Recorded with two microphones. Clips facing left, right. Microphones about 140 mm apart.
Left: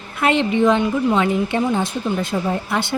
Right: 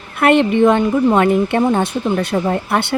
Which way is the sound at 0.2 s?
60° right (ahead or behind).